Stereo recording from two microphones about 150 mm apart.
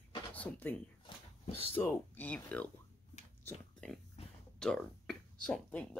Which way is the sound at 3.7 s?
5° left (ahead or behind).